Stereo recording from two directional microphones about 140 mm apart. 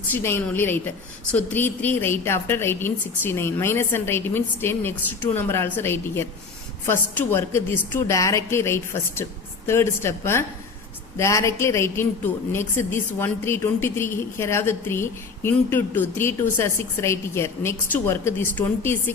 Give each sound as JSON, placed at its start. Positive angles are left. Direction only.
{"t": 0.1, "sound": "a woman's voice", "side_deg": 15}